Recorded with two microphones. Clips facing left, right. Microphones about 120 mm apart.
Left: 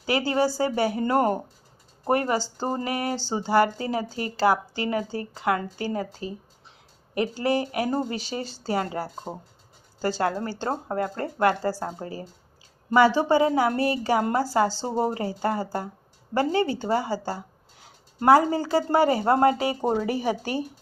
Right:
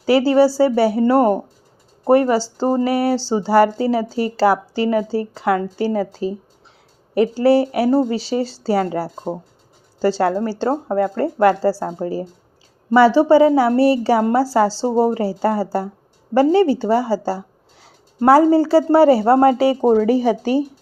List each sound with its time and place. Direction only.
0.0 s speech: 35° right (ahead or behind)
9.0 s speech: 20° right (ahead or behind)
10.0 s speech: 30° right (ahead or behind)